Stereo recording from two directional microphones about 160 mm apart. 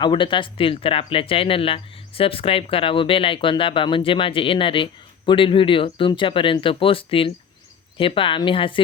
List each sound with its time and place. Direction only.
0.0 s speech: 30° left (ahead or behind)